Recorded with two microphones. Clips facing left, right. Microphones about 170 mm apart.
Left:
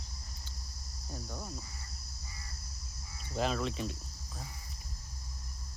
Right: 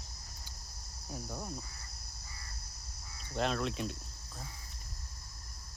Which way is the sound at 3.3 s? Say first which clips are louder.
Even; centre (ahead or behind).